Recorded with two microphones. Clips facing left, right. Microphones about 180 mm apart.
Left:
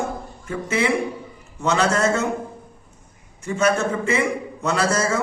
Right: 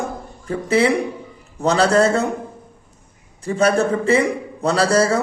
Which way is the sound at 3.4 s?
35° right (ahead or behind).